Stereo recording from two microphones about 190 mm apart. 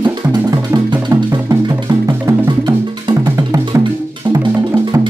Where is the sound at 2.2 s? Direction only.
25° right (ahead or behind).